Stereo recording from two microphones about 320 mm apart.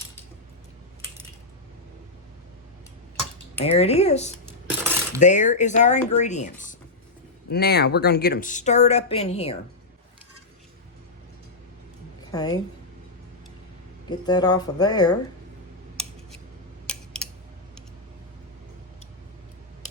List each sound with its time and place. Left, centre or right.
3.6 s a woman's voice: centre
4.4 s cutlery: centre
5.2 s a woman's voice: left
12.3 s a woman's voice: centre
14.1 s speech: centre
16.8 s a sound: centre